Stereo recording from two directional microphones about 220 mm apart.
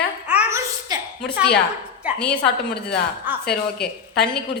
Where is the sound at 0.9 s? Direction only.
15° right (ahead or behind).